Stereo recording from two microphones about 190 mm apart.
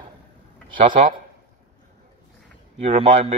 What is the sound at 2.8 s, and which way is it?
Speech, 30° right (ahead or behind).